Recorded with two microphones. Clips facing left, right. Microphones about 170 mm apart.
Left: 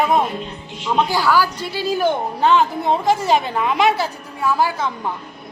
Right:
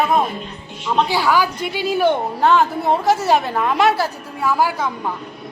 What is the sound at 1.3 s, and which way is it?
Speech, 15° right (ahead or behind).